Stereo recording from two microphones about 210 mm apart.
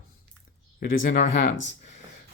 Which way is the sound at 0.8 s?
40° left (ahead or behind).